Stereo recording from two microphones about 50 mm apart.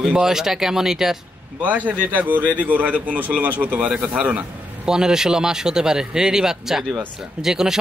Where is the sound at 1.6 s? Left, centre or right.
Right.